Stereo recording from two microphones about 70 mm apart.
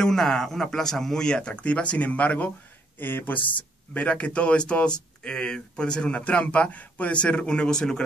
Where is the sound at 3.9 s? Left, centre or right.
Centre.